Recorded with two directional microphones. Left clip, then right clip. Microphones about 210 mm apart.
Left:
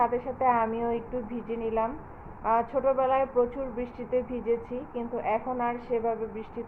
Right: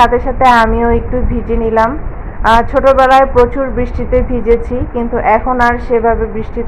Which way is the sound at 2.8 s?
10° right (ahead or behind).